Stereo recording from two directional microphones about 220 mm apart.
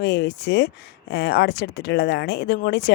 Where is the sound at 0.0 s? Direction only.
50° left (ahead or behind).